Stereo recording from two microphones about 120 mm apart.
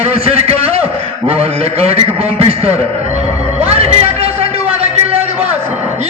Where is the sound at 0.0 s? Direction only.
55° right (ahead or behind).